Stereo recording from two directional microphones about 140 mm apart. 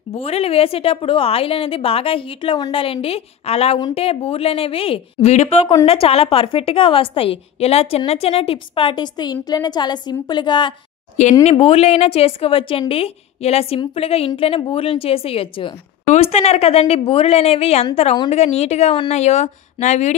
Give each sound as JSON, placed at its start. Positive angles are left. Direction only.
{"t": 0.1, "sound": "a woman's voice", "side_deg": 45}
{"t": 11.2, "sound": "speech", "side_deg": 60}
{"t": 11.5, "sound": "a woman's voice", "side_deg": 45}
{"t": 16.1, "sound": "a woman's voice", "side_deg": 50}